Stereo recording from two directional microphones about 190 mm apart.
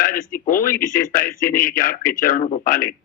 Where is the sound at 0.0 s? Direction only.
45° left (ahead or behind).